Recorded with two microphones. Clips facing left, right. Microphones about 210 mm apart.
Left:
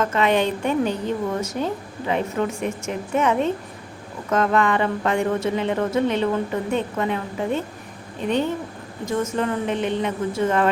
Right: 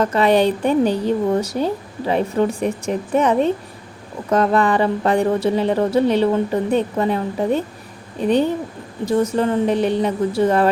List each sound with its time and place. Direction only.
0.0 s a woman's voice: 35° right (ahead or behind)